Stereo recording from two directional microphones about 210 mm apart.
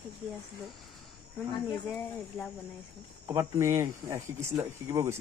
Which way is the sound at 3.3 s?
15° right (ahead or behind).